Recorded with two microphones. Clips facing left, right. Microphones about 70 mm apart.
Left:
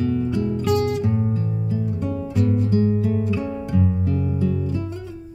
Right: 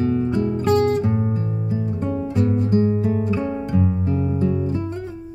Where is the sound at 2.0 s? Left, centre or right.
Right.